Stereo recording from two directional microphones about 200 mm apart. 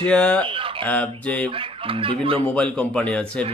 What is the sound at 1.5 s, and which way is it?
Speech, 25° right (ahead or behind).